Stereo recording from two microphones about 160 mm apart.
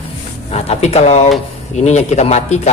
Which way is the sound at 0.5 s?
40° left (ahead or behind).